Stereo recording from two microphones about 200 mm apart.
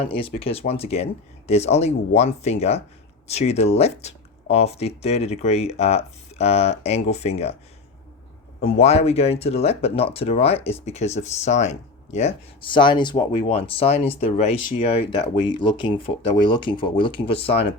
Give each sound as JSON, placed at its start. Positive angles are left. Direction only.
{"t": 0.2, "sound": "speech", "side_deg": 30}
{"t": 8.6, "sound": "speech", "side_deg": 30}